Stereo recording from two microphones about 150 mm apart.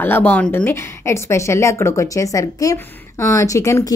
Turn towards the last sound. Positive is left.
turn(degrees=20)  # may be behind; listen again after turning